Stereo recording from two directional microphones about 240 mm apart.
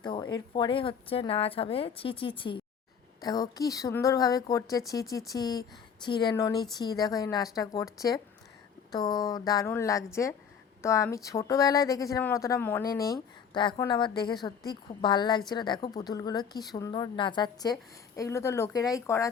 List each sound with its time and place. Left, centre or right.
0.0 s a woman's voice: centre